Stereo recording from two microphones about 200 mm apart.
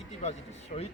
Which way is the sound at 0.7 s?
40° left (ahead or behind).